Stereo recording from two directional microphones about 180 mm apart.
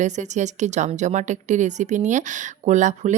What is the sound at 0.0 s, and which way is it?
Speech, 40° right (ahead or behind).